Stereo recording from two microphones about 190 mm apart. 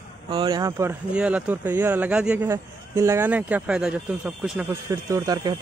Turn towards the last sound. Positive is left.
turn(degrees=-20)  # may be behind; listen again after turning